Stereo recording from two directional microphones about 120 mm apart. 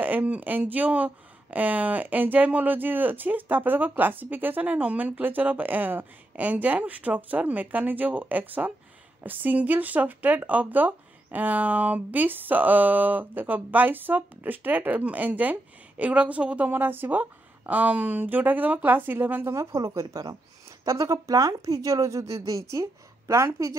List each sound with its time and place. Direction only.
0.0 s a woman's voice: 15° right (ahead or behind)